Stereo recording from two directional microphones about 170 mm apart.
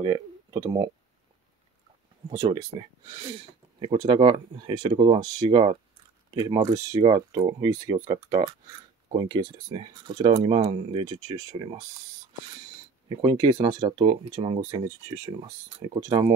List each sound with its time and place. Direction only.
0.0 s speech: 25° right (ahead or behind)
2.7 s speech: 30° right (ahead or behind)
13.2 s speech: 25° right (ahead or behind)